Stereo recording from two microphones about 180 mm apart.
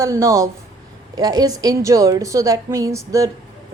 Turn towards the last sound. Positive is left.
turn(degrees=-15)  # may be behind; listen again after turning